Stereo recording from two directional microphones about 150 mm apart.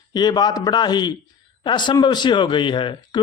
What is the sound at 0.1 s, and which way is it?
Speech, 30° left (ahead or behind).